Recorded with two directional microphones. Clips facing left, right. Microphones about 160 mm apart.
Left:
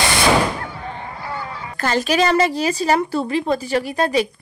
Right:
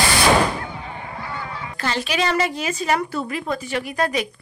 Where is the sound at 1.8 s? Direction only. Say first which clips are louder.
Left 5 dB; 45° left (ahead or behind).